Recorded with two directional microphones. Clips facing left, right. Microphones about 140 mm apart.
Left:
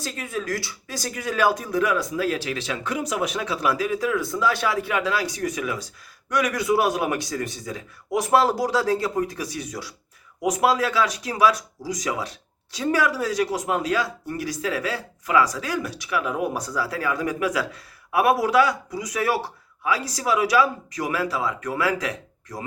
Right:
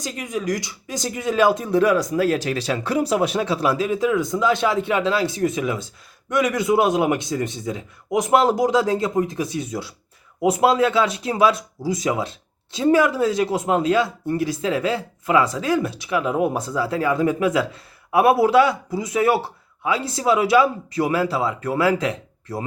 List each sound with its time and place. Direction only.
0.0 s speech: 15° right (ahead or behind)